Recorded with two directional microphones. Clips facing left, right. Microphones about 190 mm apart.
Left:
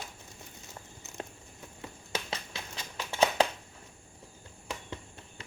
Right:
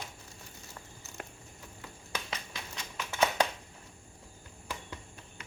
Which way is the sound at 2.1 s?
30° left (ahead or behind).